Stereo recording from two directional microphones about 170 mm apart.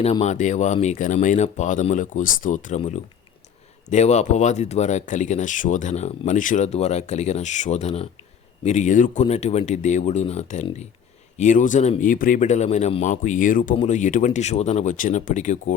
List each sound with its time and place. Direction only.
0.0 s speech: 40° left (ahead or behind)